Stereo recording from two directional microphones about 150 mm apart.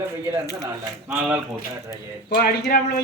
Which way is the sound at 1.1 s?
15° right (ahead or behind).